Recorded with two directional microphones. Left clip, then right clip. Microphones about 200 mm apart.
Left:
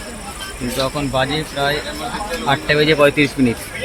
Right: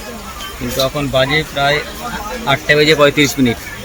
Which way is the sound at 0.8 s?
10° right (ahead or behind).